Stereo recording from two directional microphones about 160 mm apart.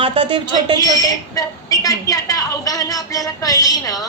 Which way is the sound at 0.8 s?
25° left (ahead or behind).